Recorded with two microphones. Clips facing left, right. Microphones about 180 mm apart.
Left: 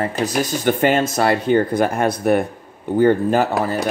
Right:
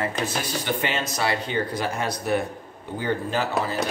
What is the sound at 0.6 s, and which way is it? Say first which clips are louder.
Speech: left 12 dB; 50° left (ahead or behind).